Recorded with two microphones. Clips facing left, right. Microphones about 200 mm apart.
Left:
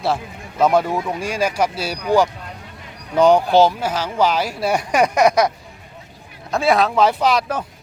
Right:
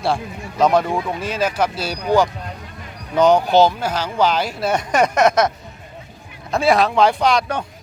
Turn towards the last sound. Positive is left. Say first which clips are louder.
# even
turn(degrees=5)  # may be behind; listen again after turning